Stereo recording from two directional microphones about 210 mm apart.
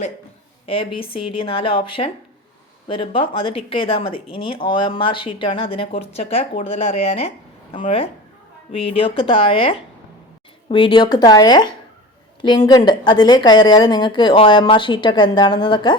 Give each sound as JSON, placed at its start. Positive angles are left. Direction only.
{"t": 0.7, "sound": "speech", "side_deg": 25}